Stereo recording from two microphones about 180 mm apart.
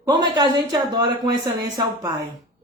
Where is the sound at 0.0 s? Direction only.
25° right (ahead or behind).